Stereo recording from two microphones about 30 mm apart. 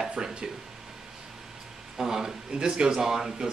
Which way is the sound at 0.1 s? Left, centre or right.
Right.